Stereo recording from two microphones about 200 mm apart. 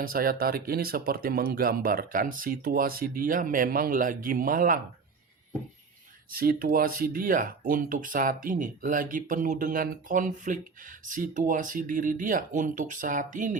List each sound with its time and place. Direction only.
0.0 s speech: 45° right (ahead or behind)
6.3 s speech: 45° right (ahead or behind)